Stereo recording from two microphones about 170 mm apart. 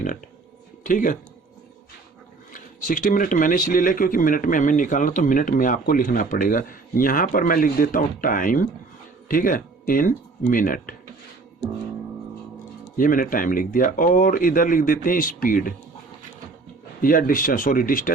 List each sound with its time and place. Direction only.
0.9 s speech: 50° left (ahead or behind)
2.5 s speech: 55° left (ahead or behind)
13.0 s speech: 55° left (ahead or behind)
17.0 s speech: 55° left (ahead or behind)